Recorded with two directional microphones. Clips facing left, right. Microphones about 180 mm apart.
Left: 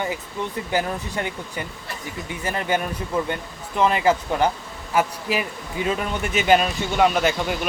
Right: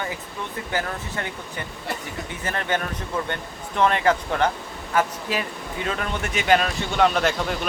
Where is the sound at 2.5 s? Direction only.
10° left (ahead or behind).